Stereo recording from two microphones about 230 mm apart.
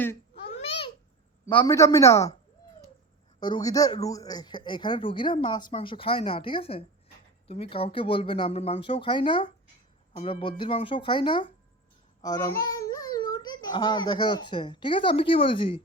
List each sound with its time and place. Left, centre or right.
0.5 s babbling: left
1.5 s a man's voice: centre
3.4 s a man's voice: centre